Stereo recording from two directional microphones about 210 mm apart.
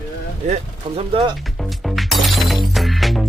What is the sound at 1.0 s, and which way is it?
Speech, 25° right (ahead or behind).